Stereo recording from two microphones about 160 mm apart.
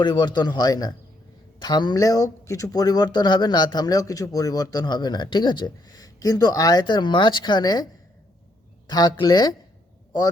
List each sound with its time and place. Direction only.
0.0 s speech: 25° left (ahead or behind)
8.9 s speech: 25° left (ahead or behind)